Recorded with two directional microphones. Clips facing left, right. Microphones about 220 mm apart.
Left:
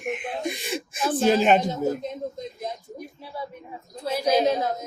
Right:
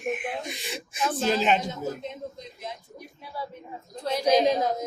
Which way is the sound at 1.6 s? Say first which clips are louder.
Left 6 dB; 40° left (ahead or behind).